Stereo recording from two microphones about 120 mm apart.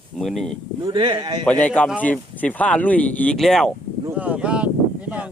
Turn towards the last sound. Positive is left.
turn(degrees=-10)  # may be behind; listen again after turning